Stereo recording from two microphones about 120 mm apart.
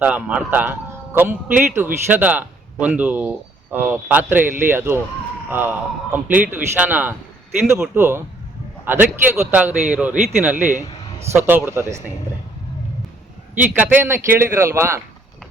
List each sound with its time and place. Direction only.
0.0 s a man's voice: 10° right (ahead or behind)
10.7 s a man's voice: 90° right
11.3 s a man's voice: 20° right (ahead or behind)
13.7 s a man's voice: 15° right (ahead or behind)